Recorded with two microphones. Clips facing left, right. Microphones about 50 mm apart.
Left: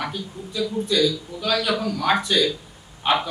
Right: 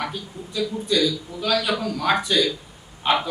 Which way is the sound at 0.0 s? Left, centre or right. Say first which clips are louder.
Even; centre.